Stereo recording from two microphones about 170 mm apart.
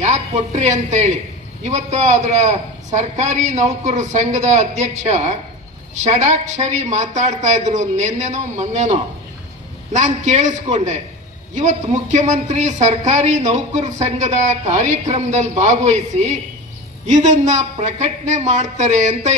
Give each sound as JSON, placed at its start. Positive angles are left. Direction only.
{"t": 0.0, "sound": "speech", "side_deg": -40}